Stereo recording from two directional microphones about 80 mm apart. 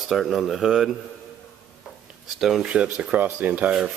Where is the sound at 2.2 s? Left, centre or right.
Centre; by 3.7 s right.